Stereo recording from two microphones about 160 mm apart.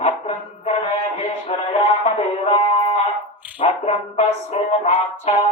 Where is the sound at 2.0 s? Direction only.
35° left (ahead or behind).